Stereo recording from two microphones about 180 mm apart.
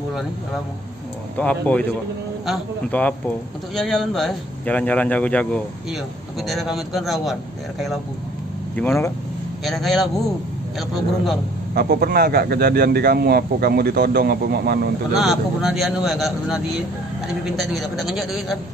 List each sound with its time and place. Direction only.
1.3 s speech: 5° left (ahead or behind)
8.7 s speech: 15° left (ahead or behind)
9.7 s speech: centre (ahead or behind)
11.7 s a man's voice: 60° right (ahead or behind)
15.1 s speech: centre (ahead or behind)